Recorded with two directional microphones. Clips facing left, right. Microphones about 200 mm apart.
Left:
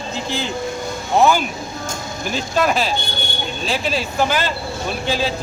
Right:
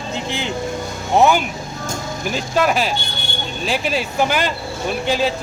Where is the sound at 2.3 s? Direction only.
10° right (ahead or behind).